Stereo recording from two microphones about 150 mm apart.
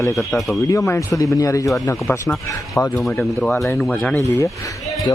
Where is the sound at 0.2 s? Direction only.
Centre (ahead or behind).